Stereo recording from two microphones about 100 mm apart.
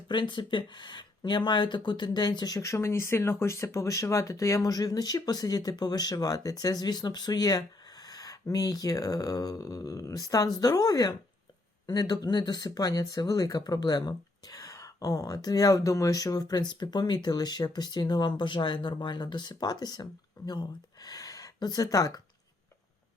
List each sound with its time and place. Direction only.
0.1 s speech: 55° left (ahead or behind); by 22.2 s 35° left (ahead or behind)